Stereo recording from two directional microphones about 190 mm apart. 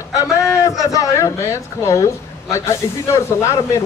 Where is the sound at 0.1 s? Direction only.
15° left (ahead or behind).